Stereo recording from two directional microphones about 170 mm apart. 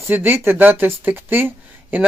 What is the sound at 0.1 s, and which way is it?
Speech, 15° right (ahead or behind).